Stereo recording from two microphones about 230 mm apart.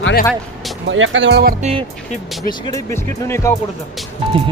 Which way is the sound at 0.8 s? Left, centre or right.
Right.